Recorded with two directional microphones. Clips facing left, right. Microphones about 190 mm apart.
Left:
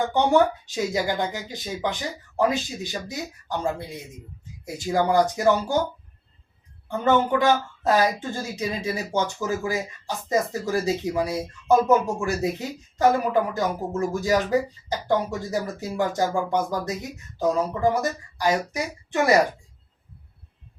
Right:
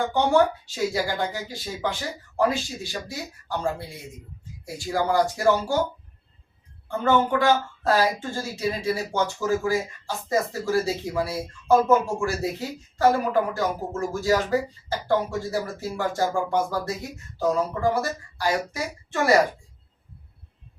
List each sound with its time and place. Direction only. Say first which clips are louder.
0.1 s speech: left 1 dB; 20° left (ahead or behind)
6.8 s speech: left 1 dB; 20° left (ahead or behind)